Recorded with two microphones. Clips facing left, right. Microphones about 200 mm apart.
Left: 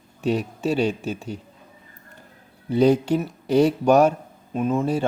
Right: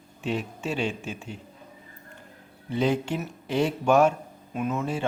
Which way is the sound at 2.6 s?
40° left (ahead or behind).